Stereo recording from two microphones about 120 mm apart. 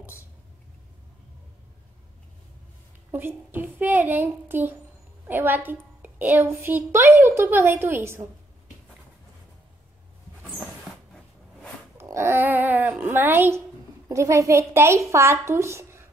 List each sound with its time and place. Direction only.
3.1 s a child's voice: 15° right (ahead or behind)
12.0 s dog: 20° right (ahead or behind)
14.0 s a woman's voice: 25° right (ahead or behind)